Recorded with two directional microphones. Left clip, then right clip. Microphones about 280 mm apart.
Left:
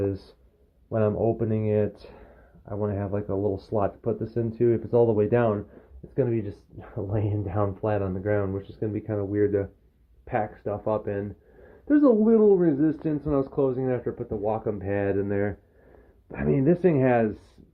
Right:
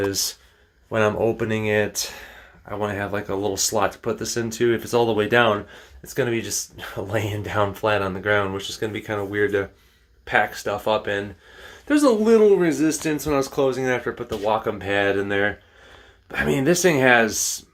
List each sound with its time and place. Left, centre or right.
0.9 s speech: centre
13.6 s speech: right
13.8 s speech: centre